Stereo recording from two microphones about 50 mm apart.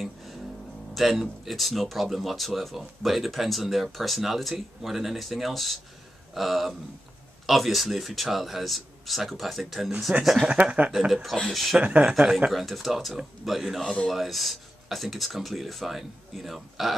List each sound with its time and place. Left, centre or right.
0.9 s speech: centre
10.1 s speech: right
10.9 s speech: centre
12.0 s speech: centre
12.5 s speech: centre